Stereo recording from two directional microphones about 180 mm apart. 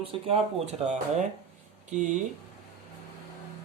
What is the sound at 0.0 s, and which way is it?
Speech, 30° right (ahead or behind).